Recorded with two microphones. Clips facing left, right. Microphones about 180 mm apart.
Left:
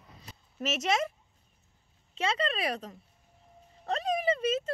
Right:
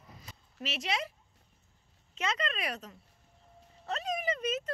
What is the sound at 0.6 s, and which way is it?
Speech, 45° left (ahead or behind).